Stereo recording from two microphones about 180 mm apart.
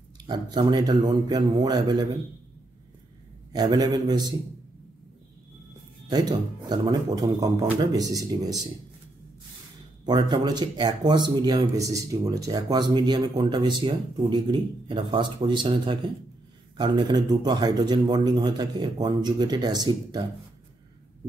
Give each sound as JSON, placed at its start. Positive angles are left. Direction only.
{"t": 0.3, "sound": "speech", "side_deg": -25}
{"t": 3.5, "sound": "speech", "side_deg": -20}
{"t": 6.0, "sound": "speech", "side_deg": -20}
{"t": 10.0, "sound": "speech", "side_deg": -25}